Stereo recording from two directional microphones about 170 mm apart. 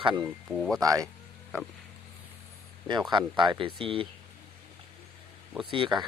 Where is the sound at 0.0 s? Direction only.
30° right (ahead or behind).